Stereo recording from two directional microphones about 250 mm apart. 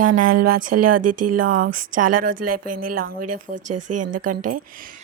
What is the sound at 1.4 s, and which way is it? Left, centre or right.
Speech, right.